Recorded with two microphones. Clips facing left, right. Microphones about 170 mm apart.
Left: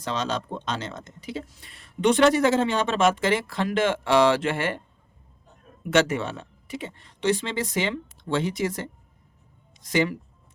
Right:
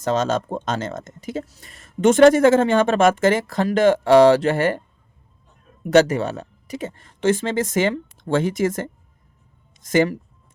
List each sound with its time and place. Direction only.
0.0 s speech: 45° right (ahead or behind)
5.9 s speech: 40° right (ahead or behind)